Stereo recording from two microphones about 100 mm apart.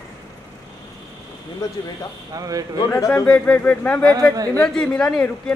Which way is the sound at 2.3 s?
35° right (ahead or behind).